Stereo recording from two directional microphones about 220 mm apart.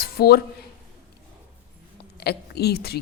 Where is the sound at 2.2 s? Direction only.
45° left (ahead or behind).